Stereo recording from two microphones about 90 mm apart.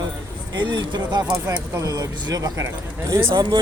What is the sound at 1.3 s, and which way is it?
Speech, 35° right (ahead or behind).